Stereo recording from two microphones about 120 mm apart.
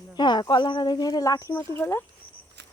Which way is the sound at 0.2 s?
35° left (ahead or behind).